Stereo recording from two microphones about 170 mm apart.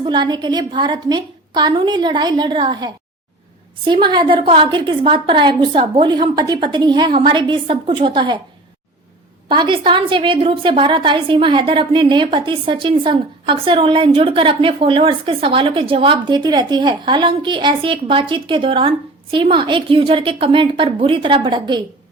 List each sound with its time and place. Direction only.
0.0 s a woman's voice: 25° right (ahead or behind)
9.5 s a woman's voice: 30° right (ahead or behind)